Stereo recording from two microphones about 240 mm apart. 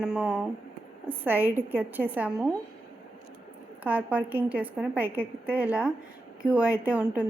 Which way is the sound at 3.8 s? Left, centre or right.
Centre.